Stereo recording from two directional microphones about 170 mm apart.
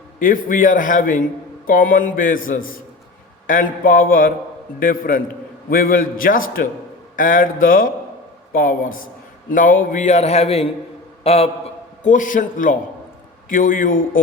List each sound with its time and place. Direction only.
0.2 s a man's voice: 50° left (ahead or behind); by 11.5 s 35° left (ahead or behind)
12.0 s a man's voice: 50° left (ahead or behind)